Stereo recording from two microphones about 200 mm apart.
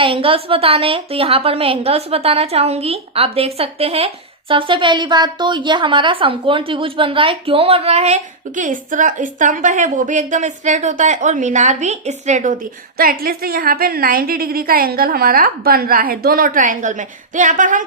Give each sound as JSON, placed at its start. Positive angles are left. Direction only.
{"t": 0.0, "sound": "a woman's voice", "side_deg": -25}
{"t": 13.0, "sound": "a woman's voice", "side_deg": -45}